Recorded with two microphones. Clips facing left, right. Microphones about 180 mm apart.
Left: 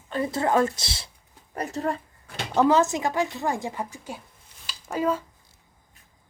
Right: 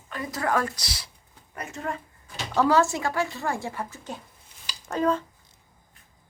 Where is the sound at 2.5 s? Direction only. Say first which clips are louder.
Left 1 dB; 20° left (ahead or behind).